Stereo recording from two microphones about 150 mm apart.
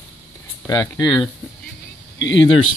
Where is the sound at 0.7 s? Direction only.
20° left (ahead or behind).